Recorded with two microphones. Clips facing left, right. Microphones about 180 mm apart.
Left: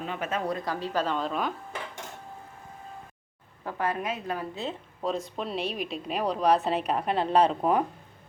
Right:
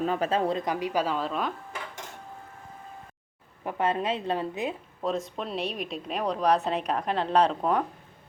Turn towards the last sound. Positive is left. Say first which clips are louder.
# left 1 dB
turn(degrees=5)  # may be behind; listen again after turning